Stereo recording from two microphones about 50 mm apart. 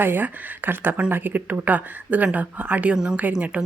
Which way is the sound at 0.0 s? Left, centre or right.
Right.